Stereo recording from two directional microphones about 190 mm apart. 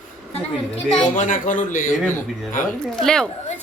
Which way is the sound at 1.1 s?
40° left (ahead or behind).